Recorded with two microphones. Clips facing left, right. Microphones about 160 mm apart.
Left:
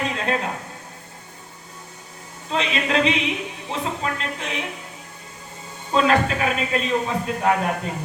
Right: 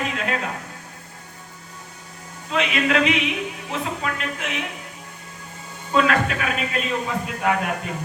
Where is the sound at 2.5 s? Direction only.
30° left (ahead or behind).